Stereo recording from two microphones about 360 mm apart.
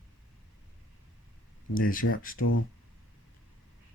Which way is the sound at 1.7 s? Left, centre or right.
Left.